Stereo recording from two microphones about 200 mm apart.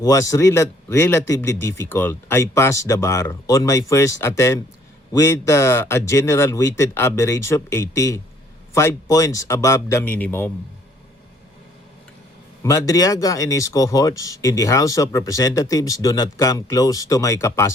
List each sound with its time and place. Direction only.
0.0 s speech: 15° left (ahead or behind)
12.6 s speech: 15° left (ahead or behind)